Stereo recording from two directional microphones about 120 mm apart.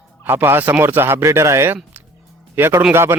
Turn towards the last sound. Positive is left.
turn(degrees=-20)  # may be behind; listen again after turning